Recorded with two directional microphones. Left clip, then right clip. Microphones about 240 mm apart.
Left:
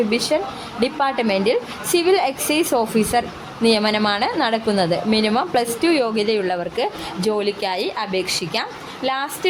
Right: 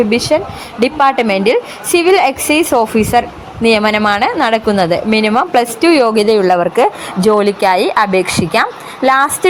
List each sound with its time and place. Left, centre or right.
0.1 s a woman's voice: centre